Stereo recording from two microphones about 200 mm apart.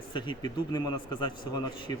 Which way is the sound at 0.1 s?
25° left (ahead or behind).